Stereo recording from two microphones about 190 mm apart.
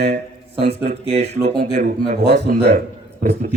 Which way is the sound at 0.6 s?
30° right (ahead or behind).